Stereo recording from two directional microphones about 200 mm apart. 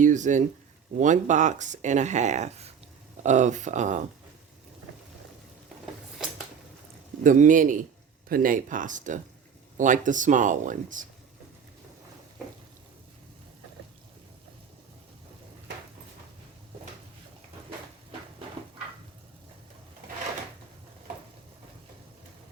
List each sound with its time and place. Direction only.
0.0 s speech: 40° right (ahead or behind)
7.3 s speech: 40° right (ahead or behind)